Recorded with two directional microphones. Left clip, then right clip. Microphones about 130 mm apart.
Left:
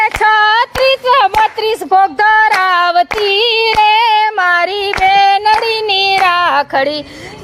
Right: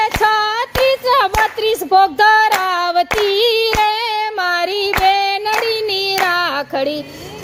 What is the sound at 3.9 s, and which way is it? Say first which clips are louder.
Child singing: left 8 dB; 15° right (ahead or behind).